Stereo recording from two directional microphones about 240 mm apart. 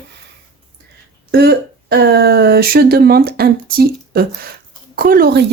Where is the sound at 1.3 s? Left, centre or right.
Right.